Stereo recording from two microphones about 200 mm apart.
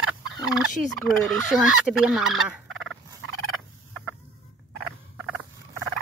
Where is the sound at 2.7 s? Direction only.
75° right (ahead or behind).